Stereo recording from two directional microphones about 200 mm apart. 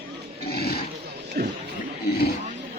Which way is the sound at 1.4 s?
55° right (ahead or behind).